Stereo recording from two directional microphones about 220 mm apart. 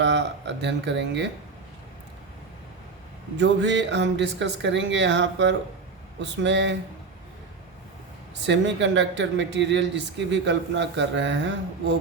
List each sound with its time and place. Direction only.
0.0 s speech: 55° right (ahead or behind)
3.3 s speech: 55° right (ahead or behind)
8.4 s speech: 55° right (ahead or behind)